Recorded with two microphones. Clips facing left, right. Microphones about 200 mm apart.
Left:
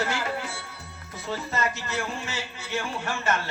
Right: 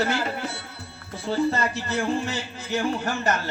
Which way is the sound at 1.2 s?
30° right (ahead or behind).